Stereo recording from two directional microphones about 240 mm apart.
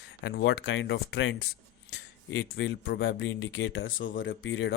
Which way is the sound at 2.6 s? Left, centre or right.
Left.